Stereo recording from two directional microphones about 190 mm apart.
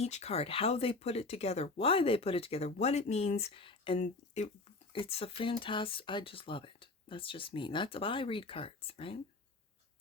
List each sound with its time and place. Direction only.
0.0 s speech: 35° left (ahead or behind)